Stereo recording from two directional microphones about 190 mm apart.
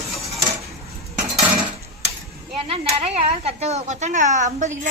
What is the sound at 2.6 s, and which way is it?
Speech, 30° right (ahead or behind).